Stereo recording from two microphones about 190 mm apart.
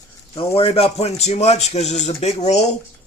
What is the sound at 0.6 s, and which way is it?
A man's voice, 30° left (ahead or behind).